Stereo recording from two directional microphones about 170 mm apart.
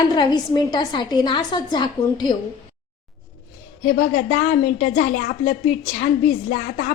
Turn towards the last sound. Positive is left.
turn(degrees=50)  # may be behind; listen again after turning